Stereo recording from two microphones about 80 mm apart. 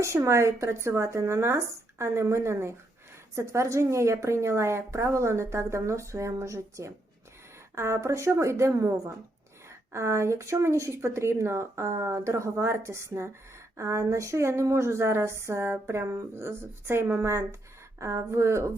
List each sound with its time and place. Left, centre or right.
0.0 s a woman's voice: right